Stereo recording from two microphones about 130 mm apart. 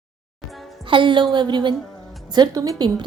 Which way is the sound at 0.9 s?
40° right (ahead or behind).